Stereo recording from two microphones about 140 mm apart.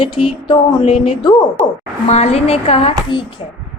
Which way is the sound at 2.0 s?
50° left (ahead or behind).